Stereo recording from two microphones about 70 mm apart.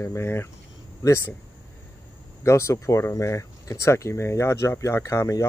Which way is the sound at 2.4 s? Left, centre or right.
Left.